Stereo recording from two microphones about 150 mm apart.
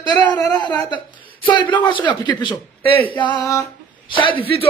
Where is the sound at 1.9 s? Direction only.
30° left (ahead or behind).